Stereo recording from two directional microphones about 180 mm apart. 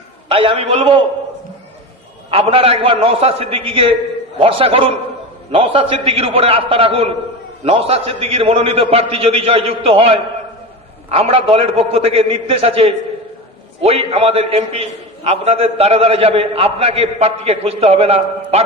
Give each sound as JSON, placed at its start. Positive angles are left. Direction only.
{"t": 0.3, "sound": "a man's voice", "side_deg": -30}
{"t": 2.3, "sound": "a man's voice", "side_deg": -30}